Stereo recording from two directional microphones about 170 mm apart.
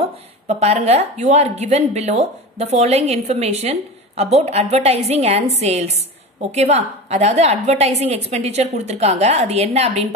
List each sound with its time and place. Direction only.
0.5 s a woman's voice: 40° right (ahead or behind)